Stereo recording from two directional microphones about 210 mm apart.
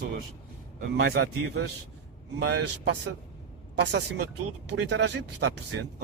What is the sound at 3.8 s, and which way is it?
Speech, 55° right (ahead or behind).